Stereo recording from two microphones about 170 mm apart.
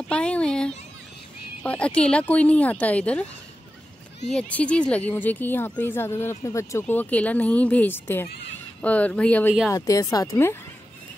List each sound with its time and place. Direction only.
0.1 s a sound: 5° left (ahead or behind)
1.6 s speech: 5° left (ahead or behind)
4.3 s speech: 5° left (ahead or behind)
9.7 s speech: 20° left (ahead or behind)